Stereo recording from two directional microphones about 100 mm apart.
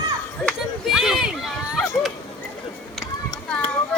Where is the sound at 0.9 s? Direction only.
5° right (ahead or behind).